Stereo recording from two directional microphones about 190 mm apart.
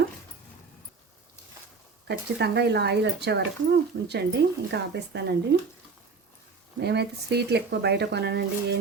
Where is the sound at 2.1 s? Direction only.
60° right (ahead or behind).